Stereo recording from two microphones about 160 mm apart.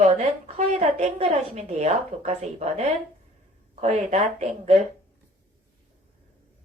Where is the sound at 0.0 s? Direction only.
40° right (ahead or behind).